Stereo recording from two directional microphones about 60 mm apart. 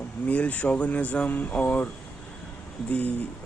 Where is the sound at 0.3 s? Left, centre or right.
Left.